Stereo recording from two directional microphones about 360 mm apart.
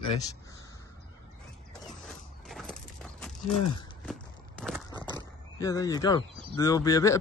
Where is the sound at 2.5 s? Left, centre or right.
Centre.